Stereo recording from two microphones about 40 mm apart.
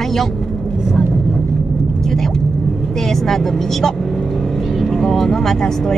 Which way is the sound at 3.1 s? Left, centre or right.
Centre.